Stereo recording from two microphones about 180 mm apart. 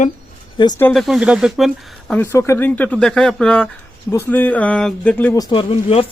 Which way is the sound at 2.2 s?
15° left (ahead or behind).